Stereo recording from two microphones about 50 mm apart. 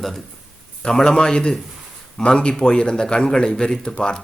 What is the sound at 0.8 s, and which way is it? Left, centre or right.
A man's voice, centre.